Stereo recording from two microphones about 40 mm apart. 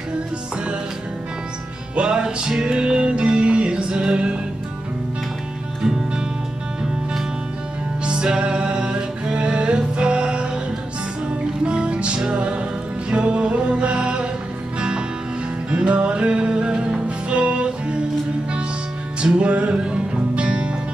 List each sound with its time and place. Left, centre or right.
2.0 s music: right
5.8 s music: centre
8.0 s music: right
11.6 s music: right
19.3 s music: right